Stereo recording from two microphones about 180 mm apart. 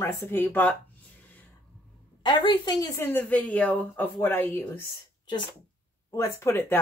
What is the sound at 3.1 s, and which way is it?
Speech, 10° left (ahead or behind).